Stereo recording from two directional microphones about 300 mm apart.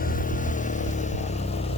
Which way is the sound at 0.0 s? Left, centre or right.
Left.